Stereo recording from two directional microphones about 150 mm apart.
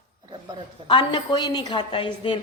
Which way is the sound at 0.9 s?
30° left (ahead or behind).